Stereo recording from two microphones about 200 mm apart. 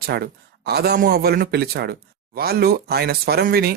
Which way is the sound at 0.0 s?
50° right (ahead or behind).